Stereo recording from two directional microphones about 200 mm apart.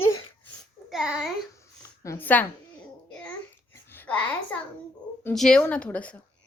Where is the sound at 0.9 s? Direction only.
Centre (ahead or behind).